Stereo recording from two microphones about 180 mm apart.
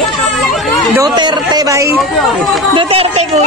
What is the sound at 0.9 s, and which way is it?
Speech, 20° right (ahead or behind).